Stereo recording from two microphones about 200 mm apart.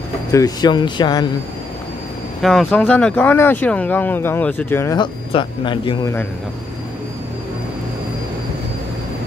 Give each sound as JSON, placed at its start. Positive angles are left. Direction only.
{"t": 0.3, "sound": "speech", "side_deg": 20}
{"t": 2.4, "sound": "speech", "side_deg": 5}